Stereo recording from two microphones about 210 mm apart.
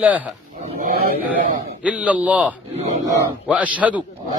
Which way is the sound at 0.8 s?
45° right (ahead or behind).